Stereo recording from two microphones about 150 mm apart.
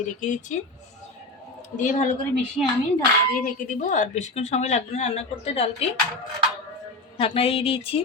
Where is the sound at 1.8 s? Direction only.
55° left (ahead or behind).